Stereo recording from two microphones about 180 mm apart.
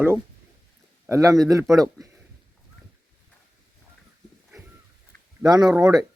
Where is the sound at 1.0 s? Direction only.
20° right (ahead or behind).